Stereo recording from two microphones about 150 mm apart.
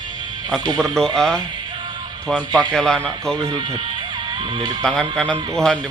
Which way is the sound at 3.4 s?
25° right (ahead or behind).